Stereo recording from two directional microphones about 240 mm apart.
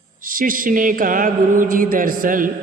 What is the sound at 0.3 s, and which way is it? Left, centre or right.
A man's voice, right.